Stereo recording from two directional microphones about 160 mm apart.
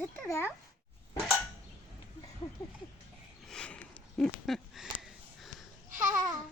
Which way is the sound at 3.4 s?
5° left (ahead or behind).